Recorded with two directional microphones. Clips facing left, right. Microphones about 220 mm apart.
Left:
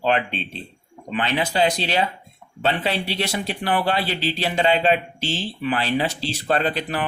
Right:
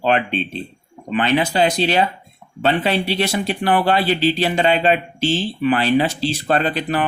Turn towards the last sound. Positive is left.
turn(degrees=-55)  # may be behind; listen again after turning